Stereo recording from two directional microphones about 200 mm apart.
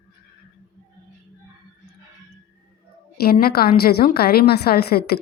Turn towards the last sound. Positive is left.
turn(degrees=50)  # may be behind; listen again after turning